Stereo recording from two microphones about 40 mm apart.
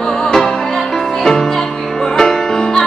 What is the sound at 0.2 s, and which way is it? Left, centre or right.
Music, centre.